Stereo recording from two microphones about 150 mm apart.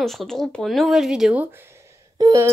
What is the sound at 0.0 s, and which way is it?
Speech, centre (ahead or behind).